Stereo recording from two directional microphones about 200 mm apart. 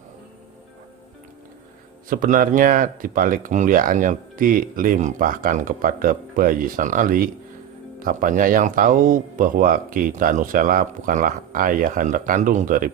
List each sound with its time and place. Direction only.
2.0 s speech: 40° right (ahead or behind)